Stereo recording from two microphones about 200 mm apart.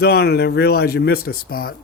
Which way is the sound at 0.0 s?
50° left (ahead or behind).